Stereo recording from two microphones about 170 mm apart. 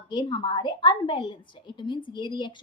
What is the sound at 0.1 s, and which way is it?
A woman's voice, 25° left (ahead or behind).